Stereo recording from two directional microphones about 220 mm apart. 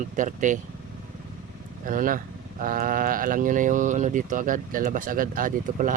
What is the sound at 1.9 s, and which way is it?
Speech, 40° right (ahead or behind).